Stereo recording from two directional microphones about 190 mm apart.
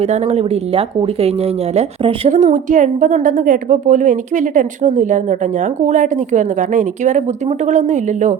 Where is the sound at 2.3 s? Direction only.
40° right (ahead or behind).